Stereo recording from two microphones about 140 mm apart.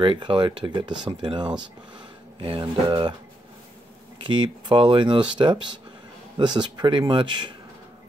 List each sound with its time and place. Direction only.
0.0 s speech: 35° right (ahead or behind)
4.3 s speech: 35° right (ahead or behind)